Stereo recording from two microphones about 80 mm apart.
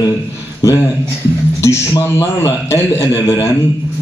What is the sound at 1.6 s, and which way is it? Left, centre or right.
A man's voice, left.